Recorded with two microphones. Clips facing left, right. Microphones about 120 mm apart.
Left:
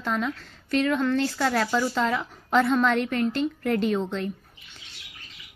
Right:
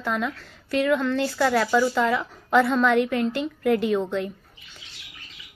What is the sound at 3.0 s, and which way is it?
A woman's voice, 20° right (ahead or behind).